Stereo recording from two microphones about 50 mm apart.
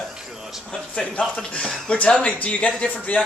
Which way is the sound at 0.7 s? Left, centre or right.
Left.